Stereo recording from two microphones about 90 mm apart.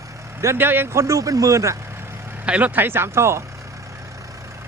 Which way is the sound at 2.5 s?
15° right (ahead or behind).